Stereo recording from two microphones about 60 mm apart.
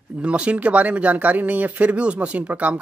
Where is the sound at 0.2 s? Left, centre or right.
Right.